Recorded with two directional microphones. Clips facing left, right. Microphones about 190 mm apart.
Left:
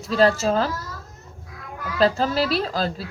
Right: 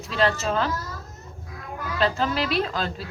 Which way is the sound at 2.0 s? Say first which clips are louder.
Left 4 dB; 35° left (ahead or behind).